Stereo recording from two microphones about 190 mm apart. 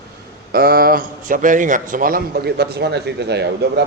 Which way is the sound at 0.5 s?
55° right (ahead or behind).